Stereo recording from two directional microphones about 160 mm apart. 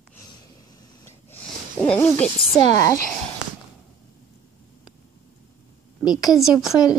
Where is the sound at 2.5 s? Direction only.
20° left (ahead or behind).